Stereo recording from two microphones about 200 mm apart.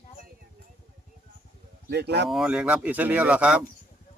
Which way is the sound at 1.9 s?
55° right (ahead or behind).